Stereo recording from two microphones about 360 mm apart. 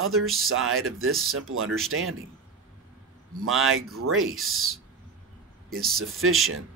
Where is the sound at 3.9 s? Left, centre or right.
Right.